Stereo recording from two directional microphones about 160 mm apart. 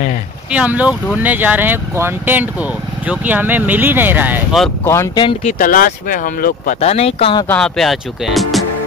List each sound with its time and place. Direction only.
0.5 s speech: 10° right (ahead or behind)
4.8 s speech: 20° left (ahead or behind)
5.5 s speech: 60° left (ahead or behind)
6.8 s speech: 40° left (ahead or behind)
7.4 s speech: 5° left (ahead or behind)